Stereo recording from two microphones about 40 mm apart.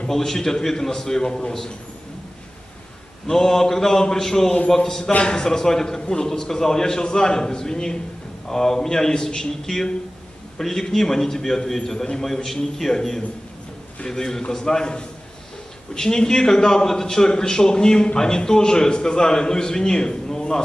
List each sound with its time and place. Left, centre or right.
0.1 s a man's voice: centre
3.3 s a man's voice: centre